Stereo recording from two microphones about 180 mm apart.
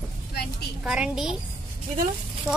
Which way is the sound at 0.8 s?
5° right (ahead or behind).